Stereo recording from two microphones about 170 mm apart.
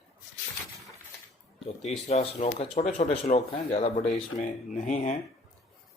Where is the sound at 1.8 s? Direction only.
40° left (ahead or behind).